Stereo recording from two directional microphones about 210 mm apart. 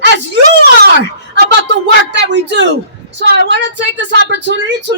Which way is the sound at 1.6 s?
55° right (ahead or behind).